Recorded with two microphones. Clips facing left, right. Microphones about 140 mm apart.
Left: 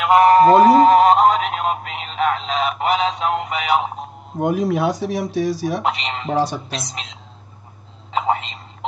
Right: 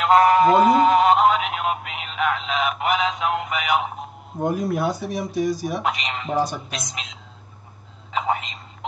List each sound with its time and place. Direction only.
0.2 s a sound: 40° left (ahead or behind)
4.4 s speech: 90° left
5.9 s speech: 30° left (ahead or behind)
6.3 s speech: 90° left
6.9 s speech: 35° left (ahead or behind)
8.1 s telephone: 30° left (ahead or behind)